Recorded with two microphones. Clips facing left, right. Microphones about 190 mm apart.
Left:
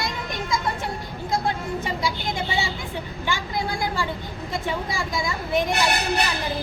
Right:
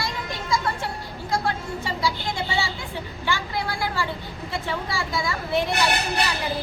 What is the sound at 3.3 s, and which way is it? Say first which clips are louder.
A woman's voice: even; 15° left (ahead or behind).